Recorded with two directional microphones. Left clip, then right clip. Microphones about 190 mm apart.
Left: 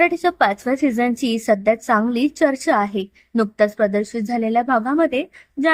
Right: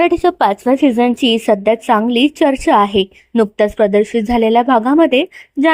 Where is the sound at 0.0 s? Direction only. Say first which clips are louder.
Right 4 dB; 15° right (ahead or behind).